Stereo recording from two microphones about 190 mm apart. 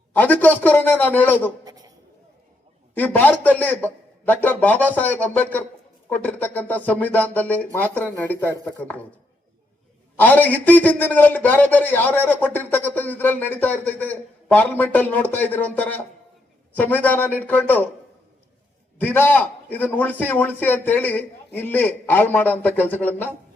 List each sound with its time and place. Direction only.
0.1 s a man's voice: 10° left (ahead or behind)
1.6 s a sound: 20° right (ahead or behind)
2.9 s a man's voice: 10° left (ahead or behind)
10.2 s a man's voice: 10° left (ahead or behind)
18.9 s a man's voice: 10° left (ahead or behind)